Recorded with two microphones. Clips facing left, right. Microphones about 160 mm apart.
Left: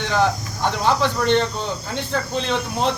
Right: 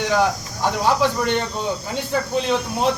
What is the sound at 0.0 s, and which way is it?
Speech, 5° right (ahead or behind).